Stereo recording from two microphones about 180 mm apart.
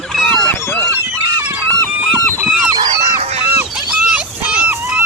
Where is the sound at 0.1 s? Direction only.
Centre (ahead or behind).